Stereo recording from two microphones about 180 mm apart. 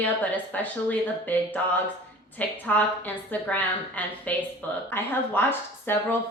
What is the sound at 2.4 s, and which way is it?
Speech, 10° left (ahead or behind).